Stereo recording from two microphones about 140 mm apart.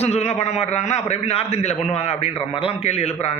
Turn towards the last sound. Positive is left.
turn(degrees=50)  # may be behind; listen again after turning